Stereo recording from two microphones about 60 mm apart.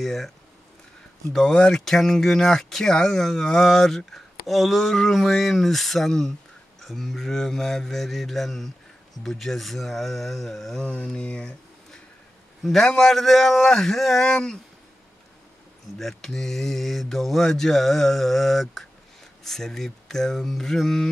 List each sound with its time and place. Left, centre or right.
0.0 s speech: centre
1.3 s speech: centre
11.1 s a sound: centre
12.8 s speech: centre
16.0 s speech: centre